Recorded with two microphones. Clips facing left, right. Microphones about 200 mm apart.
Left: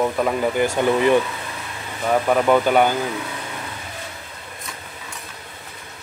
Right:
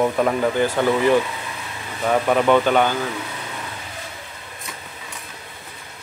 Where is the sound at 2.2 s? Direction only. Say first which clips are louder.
Even; 5° left (ahead or behind).